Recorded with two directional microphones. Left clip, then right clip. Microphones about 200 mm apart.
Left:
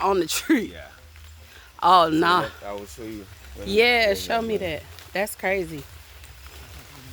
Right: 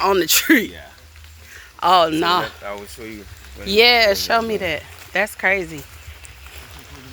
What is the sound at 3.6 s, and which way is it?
Speech, 5° left (ahead or behind).